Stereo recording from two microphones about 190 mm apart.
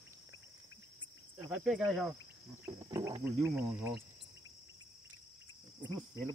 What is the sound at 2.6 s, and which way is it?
Speech, 20° right (ahead or behind).